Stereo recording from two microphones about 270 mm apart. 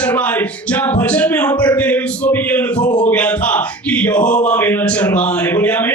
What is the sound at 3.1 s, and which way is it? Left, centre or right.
Speech, centre.